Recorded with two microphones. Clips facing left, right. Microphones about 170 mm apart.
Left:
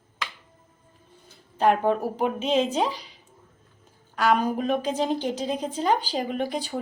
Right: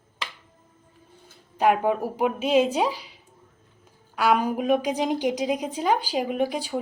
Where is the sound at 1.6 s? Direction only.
10° right (ahead or behind).